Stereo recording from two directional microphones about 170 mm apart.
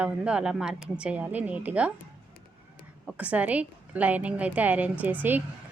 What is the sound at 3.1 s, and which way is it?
A woman's voice, 10° right (ahead or behind).